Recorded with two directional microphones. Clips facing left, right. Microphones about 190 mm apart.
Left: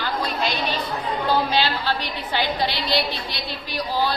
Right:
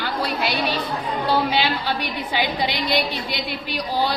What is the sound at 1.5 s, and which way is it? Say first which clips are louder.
A woman's voice: even; 15° right (ahead or behind).